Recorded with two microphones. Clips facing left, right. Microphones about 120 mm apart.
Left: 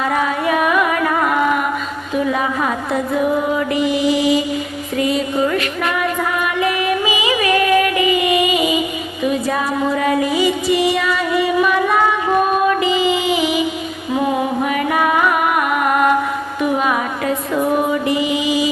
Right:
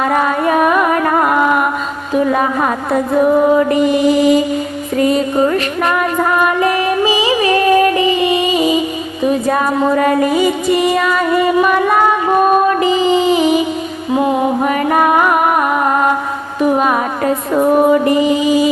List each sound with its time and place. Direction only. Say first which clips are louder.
0.0 s music: right 4 dB; 50° right (ahead or behind); by 16.1 s 25° right (ahead or behind)
16.6 s music: right 5 dB; 45° right (ahead or behind)